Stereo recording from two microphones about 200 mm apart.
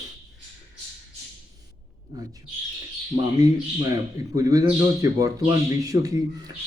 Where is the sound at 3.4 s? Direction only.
20° right (ahead or behind).